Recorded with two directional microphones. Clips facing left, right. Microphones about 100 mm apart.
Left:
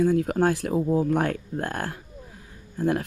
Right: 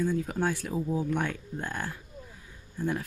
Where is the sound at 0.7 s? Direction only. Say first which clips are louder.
Left 7 dB; 40° left (ahead or behind).